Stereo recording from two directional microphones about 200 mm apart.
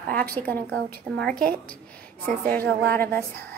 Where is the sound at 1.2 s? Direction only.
5° left (ahead or behind).